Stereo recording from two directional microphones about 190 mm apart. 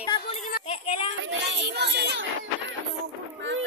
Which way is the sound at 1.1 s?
80° right.